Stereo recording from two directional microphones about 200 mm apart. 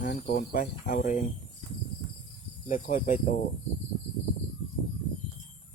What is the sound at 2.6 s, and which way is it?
Speech, 40° left (ahead or behind).